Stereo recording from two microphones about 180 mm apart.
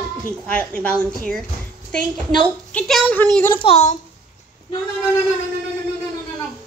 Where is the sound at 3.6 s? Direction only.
35° left (ahead or behind).